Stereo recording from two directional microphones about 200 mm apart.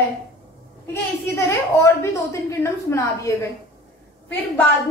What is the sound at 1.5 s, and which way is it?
A woman's voice, 15° left (ahead or behind).